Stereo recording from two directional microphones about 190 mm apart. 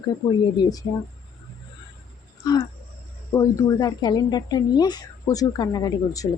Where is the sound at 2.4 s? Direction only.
20° left (ahead or behind).